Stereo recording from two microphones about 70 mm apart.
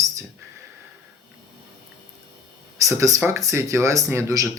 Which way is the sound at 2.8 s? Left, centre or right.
Right.